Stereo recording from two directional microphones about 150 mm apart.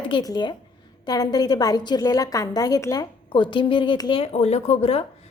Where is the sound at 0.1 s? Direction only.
30° left (ahead or behind).